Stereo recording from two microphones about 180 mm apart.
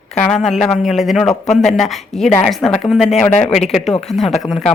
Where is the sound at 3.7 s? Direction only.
Centre (ahead or behind).